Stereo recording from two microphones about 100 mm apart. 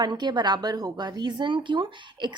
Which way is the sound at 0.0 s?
45° right (ahead or behind).